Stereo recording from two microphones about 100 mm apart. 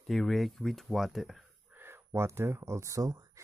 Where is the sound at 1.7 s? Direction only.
20° right (ahead or behind).